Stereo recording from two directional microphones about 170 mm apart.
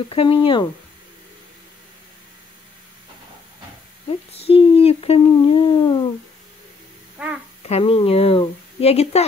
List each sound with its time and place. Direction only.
0.1 s speech: 30° left (ahead or behind)
4.3 s speech: 35° left (ahead or behind)
7.2 s babbling: 5° right (ahead or behind)
7.6 s speech: 35° left (ahead or behind)